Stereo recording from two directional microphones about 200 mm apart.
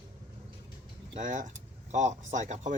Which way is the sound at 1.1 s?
40° right (ahead or behind).